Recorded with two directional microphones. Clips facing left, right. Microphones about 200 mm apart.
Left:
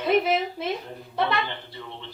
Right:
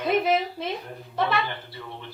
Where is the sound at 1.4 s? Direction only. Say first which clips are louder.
Right 1 dB; 20° left (ahead or behind).